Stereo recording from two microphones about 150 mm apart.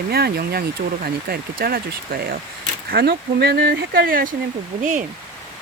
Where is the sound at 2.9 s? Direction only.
90° right; by 4.3 s 70° right (ahead or behind).